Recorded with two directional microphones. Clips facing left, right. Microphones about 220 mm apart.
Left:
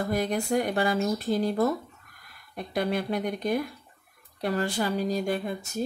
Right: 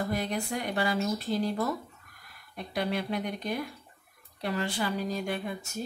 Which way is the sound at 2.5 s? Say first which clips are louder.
Left 3 dB; 50° left (ahead or behind).